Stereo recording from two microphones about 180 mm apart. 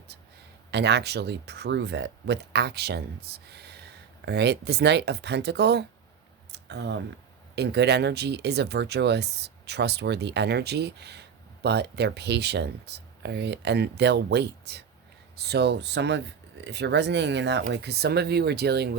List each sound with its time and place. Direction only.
0.7 s speech: 70° right (ahead or behind)
6.5 s a sound: 70° right (ahead or behind)
7.5 s speech: 65° right (ahead or behind)